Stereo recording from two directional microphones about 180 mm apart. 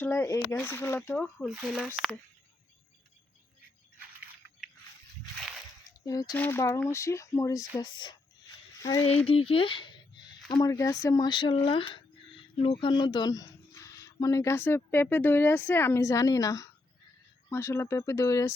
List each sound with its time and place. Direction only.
0.0 s speech: 15° left (ahead or behind); by 1.9 s centre (ahead or behind)
5.8 s a sound: 20° left (ahead or behind)
6.3 s speech: 10° left (ahead or behind)
9.2 s speech: 30° left (ahead or behind)